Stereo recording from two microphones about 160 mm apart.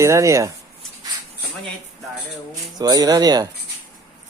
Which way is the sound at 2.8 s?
25° right (ahead or behind).